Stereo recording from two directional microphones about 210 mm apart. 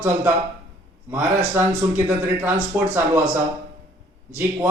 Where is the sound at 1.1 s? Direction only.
10° right (ahead or behind).